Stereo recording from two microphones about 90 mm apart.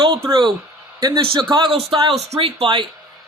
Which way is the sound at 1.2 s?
65° right (ahead or behind).